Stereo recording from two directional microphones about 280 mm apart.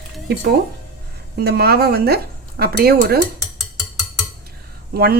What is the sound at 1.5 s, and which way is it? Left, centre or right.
Speech, right.